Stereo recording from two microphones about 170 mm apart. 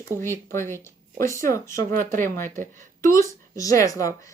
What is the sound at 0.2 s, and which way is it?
Speech, 15° left (ahead or behind).